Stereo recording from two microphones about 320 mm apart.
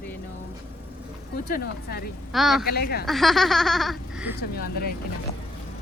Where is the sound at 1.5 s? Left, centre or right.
Left.